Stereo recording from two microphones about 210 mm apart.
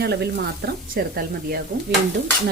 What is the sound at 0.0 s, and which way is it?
Speech, 50° right (ahead or behind).